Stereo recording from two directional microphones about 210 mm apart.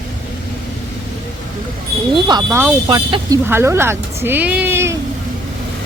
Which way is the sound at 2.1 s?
20° right (ahead or behind).